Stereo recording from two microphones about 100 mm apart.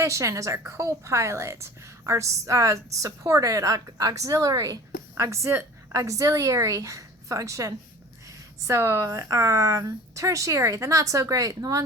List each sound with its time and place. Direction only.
0.0 s a woman's voice: 30° right (ahead or behind)